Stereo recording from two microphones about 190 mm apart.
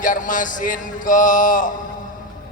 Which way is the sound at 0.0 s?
45° left (ahead or behind).